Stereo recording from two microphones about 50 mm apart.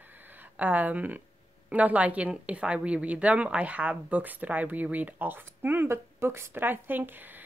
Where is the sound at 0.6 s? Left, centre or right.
Right.